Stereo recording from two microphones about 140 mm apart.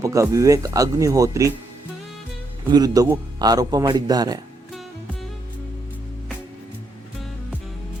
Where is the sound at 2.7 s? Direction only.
25° right (ahead or behind).